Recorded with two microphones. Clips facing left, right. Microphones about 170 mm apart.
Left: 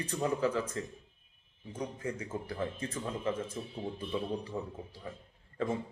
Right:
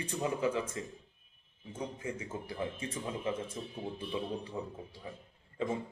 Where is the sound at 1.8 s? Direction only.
25° right (ahead or behind).